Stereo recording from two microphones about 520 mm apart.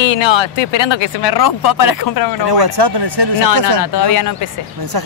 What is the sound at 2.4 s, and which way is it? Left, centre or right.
Speech, right.